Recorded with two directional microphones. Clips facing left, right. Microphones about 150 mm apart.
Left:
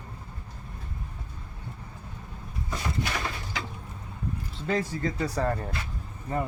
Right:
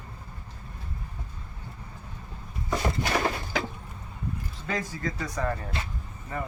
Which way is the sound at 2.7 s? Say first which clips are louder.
Right 5 dB; 50° right (ahead or behind).